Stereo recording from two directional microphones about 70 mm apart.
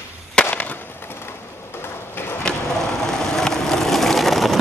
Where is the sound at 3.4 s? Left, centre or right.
Centre.